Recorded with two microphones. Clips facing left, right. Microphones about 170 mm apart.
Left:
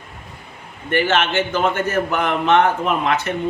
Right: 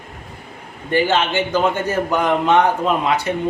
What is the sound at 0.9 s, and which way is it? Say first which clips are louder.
A man's voice: right 1 dB; 15° right (ahead or behind).